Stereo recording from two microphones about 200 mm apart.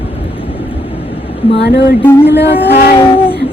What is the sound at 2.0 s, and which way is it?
Speech, 10° left (ahead or behind).